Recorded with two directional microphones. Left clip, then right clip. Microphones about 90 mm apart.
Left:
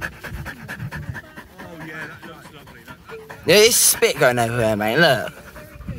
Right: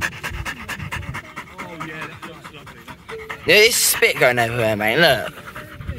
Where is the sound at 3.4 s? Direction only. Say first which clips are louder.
Even; 35° left (ahead or behind).